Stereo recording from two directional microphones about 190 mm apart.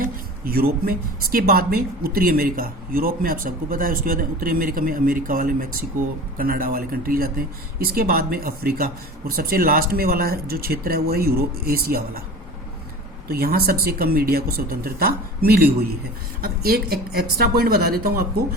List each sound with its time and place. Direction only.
0.0 s speech: 50° right (ahead or behind)
13.2 s speech: 55° right (ahead or behind)